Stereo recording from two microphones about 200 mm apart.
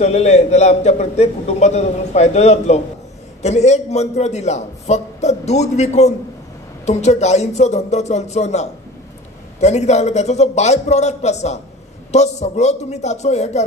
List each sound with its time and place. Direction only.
0.0 s a man's voice: 35° left (ahead or behind)